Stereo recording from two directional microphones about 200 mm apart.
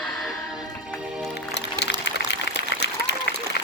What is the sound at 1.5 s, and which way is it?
Music, 55° left (ahead or behind).